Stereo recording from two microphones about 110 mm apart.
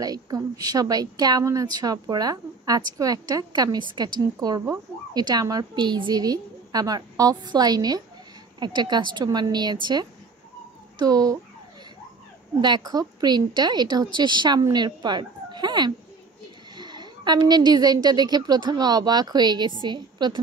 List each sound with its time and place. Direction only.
0.0 s a woman's voice: 35° right (ahead or behind)
12.5 s a woman's voice: 40° right (ahead or behind)